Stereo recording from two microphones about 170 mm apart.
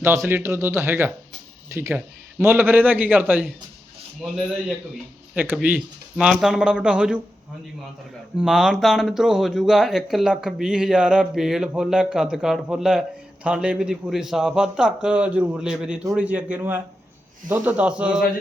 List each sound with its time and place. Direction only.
0.0 s speech: 15° right (ahead or behind)
5.3 s speech: 10° right (ahead or behind)
8.4 s speech: 5° right (ahead or behind)